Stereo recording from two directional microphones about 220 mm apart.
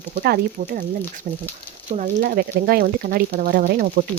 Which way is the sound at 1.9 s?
40° right (ahead or behind).